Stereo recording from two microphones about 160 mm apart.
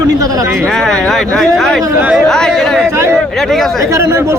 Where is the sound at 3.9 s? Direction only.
20° right (ahead or behind).